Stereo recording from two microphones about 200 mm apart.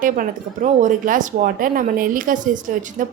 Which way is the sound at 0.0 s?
40° right (ahead or behind).